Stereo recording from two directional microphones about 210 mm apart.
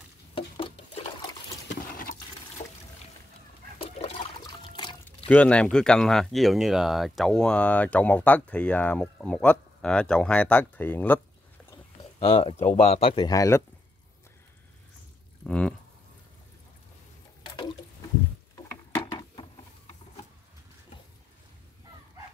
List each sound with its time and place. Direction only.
0.3 s stir: 25° left (ahead or behind)
3.8 s liquid: 25° left (ahead or behind)
4.7 s pour: 20° left (ahead or behind)
5.3 s speech: 5° left (ahead or behind)
12.2 s speech: 25° left (ahead or behind)
15.4 s speech: 5° left (ahead or behind)